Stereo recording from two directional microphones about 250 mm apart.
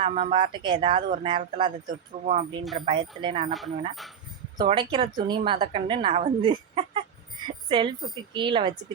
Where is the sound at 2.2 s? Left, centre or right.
Right.